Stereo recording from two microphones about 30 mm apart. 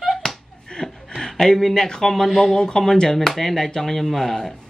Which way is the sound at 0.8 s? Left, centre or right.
Left.